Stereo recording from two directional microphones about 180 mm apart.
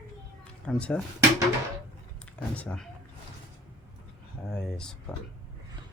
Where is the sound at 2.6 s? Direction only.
5° left (ahead or behind).